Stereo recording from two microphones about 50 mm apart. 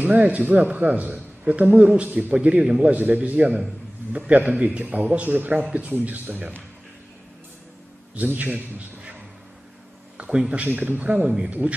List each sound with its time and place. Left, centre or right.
0.0 s a man's voice: right
8.1 s a man's voice: right
10.1 s a sound: right
10.5 s a man's voice: right
11.2 s speech: centre